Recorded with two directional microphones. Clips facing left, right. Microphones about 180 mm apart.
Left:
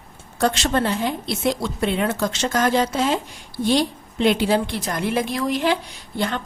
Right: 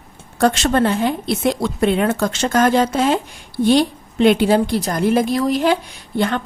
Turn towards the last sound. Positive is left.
turn(degrees=-55)  # may be behind; listen again after turning